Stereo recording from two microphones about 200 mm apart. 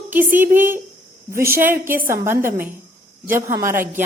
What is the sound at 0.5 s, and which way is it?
Speech, 45° right (ahead or behind).